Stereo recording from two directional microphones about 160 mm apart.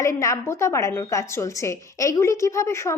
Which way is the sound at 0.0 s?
20° left (ahead or behind).